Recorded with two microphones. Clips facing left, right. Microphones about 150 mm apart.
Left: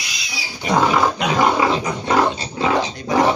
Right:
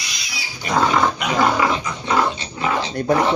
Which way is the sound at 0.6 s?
15° left (ahead or behind).